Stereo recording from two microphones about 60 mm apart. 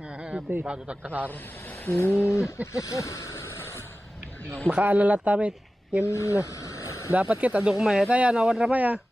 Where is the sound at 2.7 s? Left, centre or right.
Left.